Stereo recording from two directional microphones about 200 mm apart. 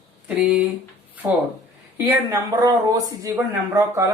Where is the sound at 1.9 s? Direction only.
15° right (ahead or behind).